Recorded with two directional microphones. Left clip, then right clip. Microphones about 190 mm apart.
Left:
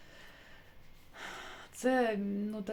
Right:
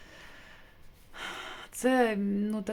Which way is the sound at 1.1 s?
25° right (ahead or behind).